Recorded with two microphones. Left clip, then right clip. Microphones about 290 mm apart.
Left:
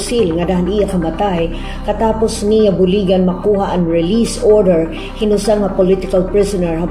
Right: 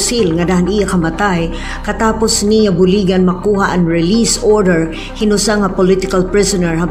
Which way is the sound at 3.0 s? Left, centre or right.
Right.